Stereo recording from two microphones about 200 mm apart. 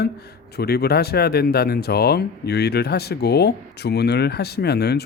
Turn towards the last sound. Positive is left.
turn(degrees=55)  # may be behind; listen again after turning